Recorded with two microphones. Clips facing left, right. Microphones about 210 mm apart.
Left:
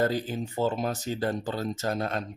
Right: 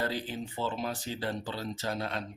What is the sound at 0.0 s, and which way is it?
Speech, 45° left (ahead or behind).